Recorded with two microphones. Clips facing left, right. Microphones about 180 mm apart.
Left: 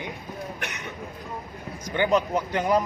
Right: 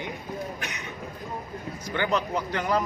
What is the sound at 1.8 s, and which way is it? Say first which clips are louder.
Speech: left 4 dB; 15° left (ahead or behind).